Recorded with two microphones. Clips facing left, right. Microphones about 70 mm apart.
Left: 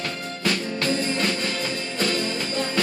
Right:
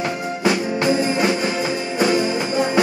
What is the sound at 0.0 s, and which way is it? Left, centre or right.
Music, centre.